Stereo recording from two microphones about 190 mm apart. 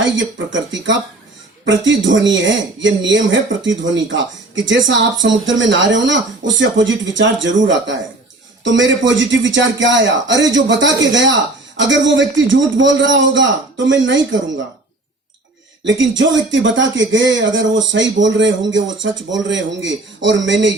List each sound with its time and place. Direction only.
0.0 s speech: 75° right (ahead or behind)
15.8 s speech: 75° right (ahead or behind)